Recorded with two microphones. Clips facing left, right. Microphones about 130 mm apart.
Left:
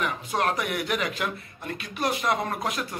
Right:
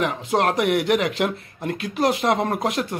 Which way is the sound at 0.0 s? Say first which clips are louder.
Right 6 dB; 90° right.